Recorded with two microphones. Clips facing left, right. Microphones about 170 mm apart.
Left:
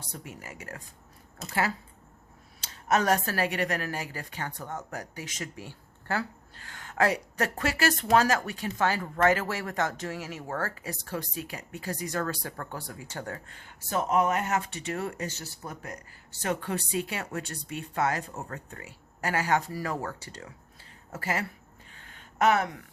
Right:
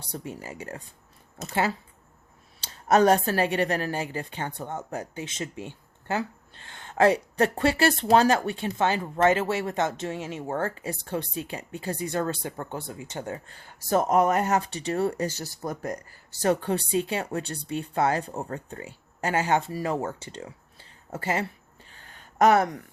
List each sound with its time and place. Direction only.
0.0 s a woman's voice: 30° right (ahead or behind)
2.6 s a woman's voice: 30° right (ahead or behind)
13.5 s a woman's voice: 35° right (ahead or behind)
21.9 s a sound: 35° right (ahead or behind)